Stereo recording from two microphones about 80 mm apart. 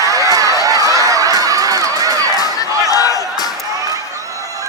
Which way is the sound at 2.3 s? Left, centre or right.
Left.